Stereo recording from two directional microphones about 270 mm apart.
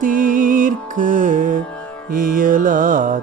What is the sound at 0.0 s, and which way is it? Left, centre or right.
Music, right.